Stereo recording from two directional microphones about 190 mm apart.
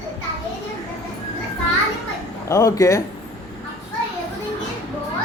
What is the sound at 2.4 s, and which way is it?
Speech, 15° left (ahead or behind).